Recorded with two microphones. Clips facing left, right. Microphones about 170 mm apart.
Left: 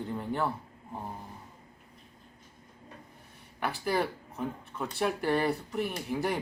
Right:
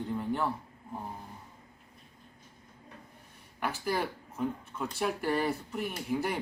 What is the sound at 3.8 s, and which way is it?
Speech, centre (ahead or behind).